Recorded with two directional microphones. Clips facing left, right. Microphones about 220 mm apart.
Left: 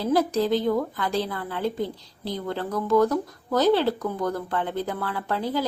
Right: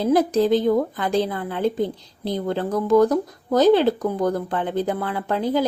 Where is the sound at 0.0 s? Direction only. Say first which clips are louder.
Right 4 dB; 20° right (ahead or behind).